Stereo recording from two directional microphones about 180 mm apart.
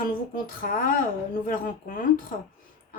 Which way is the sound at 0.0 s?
50° left (ahead or behind).